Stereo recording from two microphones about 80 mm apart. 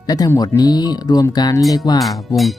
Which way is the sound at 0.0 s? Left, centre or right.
Left.